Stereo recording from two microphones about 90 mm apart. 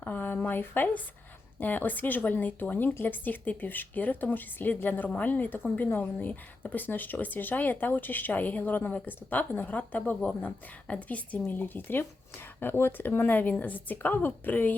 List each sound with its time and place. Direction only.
0.0 s speech: 20° left (ahead or behind)